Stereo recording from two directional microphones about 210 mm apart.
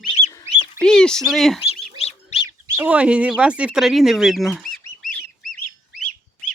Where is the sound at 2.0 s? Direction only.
30° left (ahead or behind).